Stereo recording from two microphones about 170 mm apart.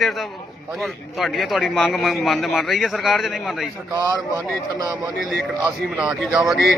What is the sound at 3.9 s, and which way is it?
Speech, 15° right (ahead or behind).